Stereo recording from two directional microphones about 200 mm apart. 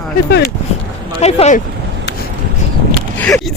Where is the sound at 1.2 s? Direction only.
35° left (ahead or behind).